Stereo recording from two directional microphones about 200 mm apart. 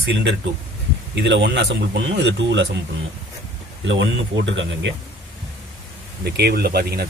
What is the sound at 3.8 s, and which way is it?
Speech, 65° right (ahead or behind).